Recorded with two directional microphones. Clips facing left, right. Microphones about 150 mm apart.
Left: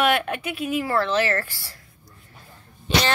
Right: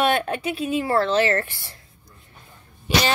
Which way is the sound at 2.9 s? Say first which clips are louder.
Right 1 dB; 10° right (ahead or behind).